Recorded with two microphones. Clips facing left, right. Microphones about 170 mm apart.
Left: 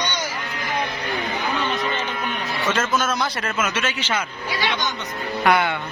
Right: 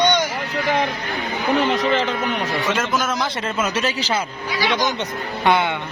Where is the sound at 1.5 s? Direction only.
90° right.